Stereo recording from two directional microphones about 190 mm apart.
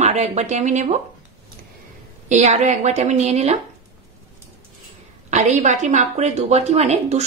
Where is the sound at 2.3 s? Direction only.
40° right (ahead or behind).